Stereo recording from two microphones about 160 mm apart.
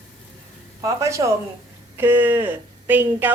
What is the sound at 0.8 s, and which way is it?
A woman's voice, 20° right (ahead or behind).